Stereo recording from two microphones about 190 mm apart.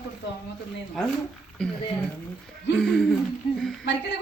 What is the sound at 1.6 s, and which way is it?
Speech, 5° left (ahead or behind).